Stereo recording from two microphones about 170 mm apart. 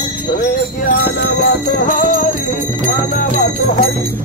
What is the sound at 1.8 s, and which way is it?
Jingle bell, 50° left (ahead or behind).